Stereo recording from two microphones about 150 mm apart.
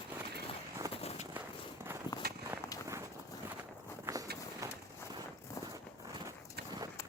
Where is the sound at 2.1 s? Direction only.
20° left (ahead or behind).